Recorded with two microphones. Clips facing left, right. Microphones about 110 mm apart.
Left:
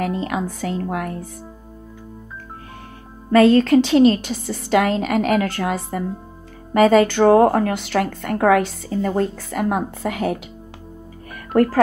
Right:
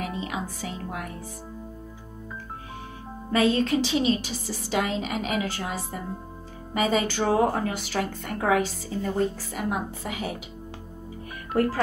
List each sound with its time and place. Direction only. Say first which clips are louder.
0.0 s speech: left 8 dB; 70° left (ahead or behind); by 1.1 s 85° left
3.3 s speech: left 9 dB; 70° left (ahead or behind)
11.5 s speech: left 7 dB; 60° left (ahead or behind)